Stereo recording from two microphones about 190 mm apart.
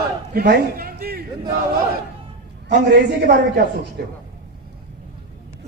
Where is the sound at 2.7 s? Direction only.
60° right (ahead or behind).